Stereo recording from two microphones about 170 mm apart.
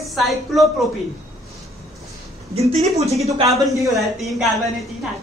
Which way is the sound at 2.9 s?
40° right (ahead or behind).